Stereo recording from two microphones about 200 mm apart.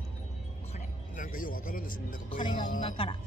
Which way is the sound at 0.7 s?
40° left (ahead or behind).